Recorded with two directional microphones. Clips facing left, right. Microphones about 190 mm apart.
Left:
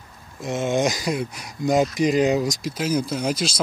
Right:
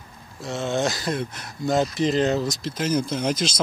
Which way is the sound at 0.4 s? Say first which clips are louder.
Left 3 dB; 15° left (ahead or behind).